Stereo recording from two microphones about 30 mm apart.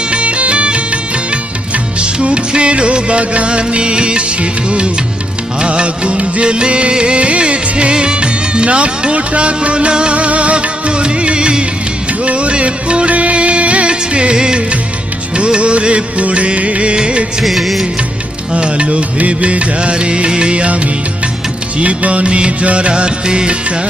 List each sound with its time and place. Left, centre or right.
0.1 s music: right
5.6 s music: right
10.2 s music: right
12.2 s music: right
13.1 s music of bollywood: right
15.4 s music: right
16.9 s music: right
17.4 s music: centre
18.5 s music: right
21.8 s music: right
23.5 s music: right